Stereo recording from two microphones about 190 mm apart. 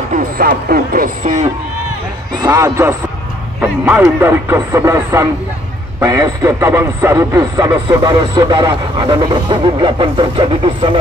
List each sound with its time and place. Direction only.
0.1 s speech: 50° right (ahead or behind)
2.4 s a man's voice: 15° right (ahead or behind)